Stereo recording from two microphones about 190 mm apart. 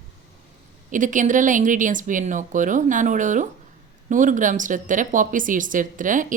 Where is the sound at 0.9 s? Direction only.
45° right (ahead or behind).